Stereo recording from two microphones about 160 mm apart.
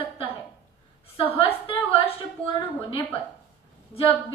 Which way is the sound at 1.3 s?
35° left (ahead or behind).